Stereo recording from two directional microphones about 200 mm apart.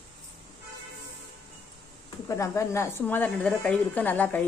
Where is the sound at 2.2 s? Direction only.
15° left (ahead or behind).